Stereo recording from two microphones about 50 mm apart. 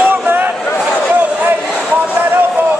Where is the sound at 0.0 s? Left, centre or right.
Right.